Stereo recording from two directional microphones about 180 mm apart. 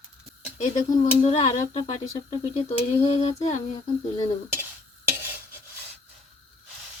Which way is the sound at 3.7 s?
25° left (ahead or behind).